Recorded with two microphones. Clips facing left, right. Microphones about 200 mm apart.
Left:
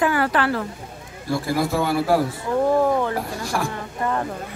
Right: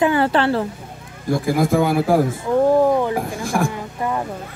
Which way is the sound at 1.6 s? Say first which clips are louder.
Right 6 dB; 50° right (ahead or behind).